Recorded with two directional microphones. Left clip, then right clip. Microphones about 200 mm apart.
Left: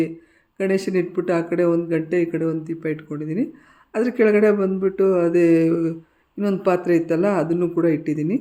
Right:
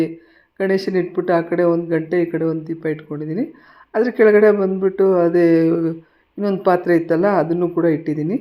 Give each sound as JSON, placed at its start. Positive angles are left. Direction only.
{"t": 0.9, "sound": "speech", "side_deg": 10}